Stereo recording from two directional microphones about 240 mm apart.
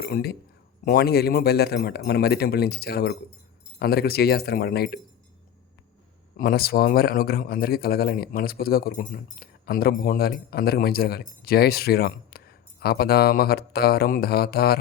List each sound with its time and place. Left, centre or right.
0.0 s a man's voice: left
6.3 s a man's voice: left